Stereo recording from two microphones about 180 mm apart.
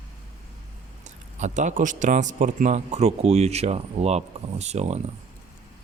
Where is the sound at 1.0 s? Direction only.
40° right (ahead or behind).